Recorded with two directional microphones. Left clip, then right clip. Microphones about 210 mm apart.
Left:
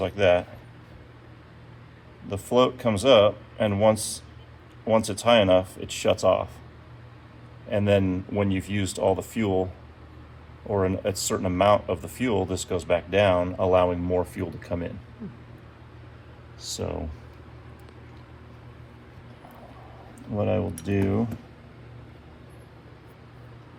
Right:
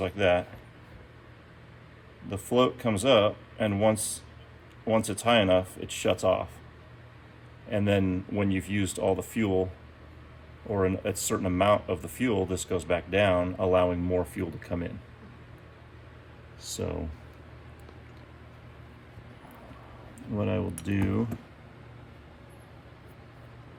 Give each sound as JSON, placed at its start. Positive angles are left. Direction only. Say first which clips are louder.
{"t": 0.0, "sound": "speech", "louder": "left 4 dB", "side_deg": 20}
{"t": 2.3, "sound": "speech", "louder": "left 4 dB", "side_deg": 20}
{"t": 7.7, "sound": "speech", "louder": "left 4 dB", "side_deg": 15}
{"t": 10.7, "sound": "speech", "louder": "left 3 dB", "side_deg": 15}
{"t": 20.3, "sound": "speech", "louder": "left 5 dB", "side_deg": 0}